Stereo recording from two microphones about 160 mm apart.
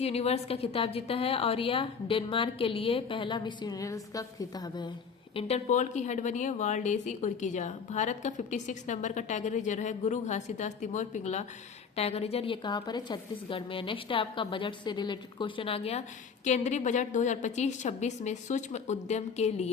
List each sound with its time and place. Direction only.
0.0 s a woman's voice: 40° left (ahead or behind); by 4.9 s 25° left (ahead or behind)
5.3 s a woman's voice: 40° left (ahead or behind)